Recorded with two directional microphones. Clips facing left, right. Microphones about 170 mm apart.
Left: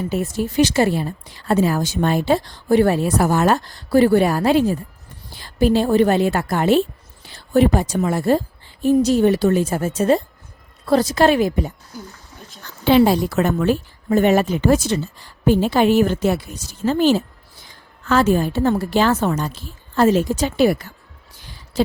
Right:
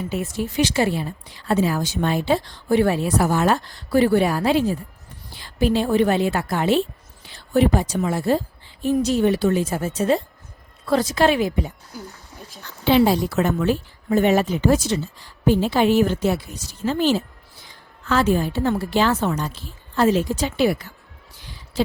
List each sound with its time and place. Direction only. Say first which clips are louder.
0.3 s a woman's voice: left 4 dB; 40° left (ahead or behind)
12.8 s a woman's voice: left 3 dB; 50° left (ahead or behind)
21.7 s a sound: left 3 dB; 45° left (ahead or behind)